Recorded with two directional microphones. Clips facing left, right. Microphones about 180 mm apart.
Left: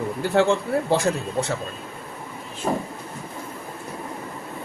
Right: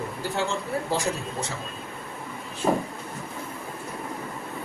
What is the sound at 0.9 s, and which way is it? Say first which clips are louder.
Speech: left 7 dB; 60° left (ahead or behind).